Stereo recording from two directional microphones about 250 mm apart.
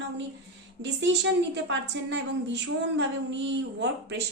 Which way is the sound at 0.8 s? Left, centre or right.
Right.